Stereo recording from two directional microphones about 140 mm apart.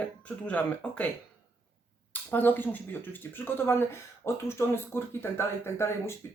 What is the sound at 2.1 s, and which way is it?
Speech, 15° left (ahead or behind).